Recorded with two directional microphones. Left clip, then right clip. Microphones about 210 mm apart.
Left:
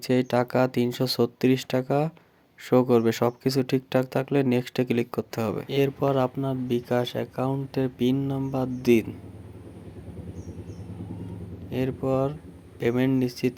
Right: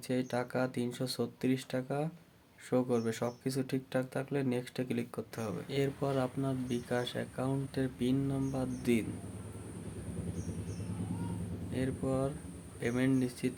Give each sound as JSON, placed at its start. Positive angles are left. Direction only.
{"t": 0.0, "sound": "speech", "side_deg": 35}
{"t": 11.7, "sound": "speech", "side_deg": 35}